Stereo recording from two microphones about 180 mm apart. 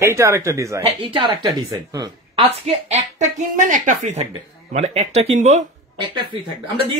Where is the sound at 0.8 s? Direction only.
30° right (ahead or behind).